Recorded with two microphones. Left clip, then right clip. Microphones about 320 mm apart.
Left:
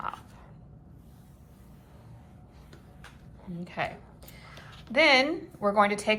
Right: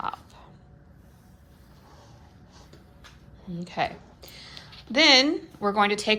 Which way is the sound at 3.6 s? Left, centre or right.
Centre.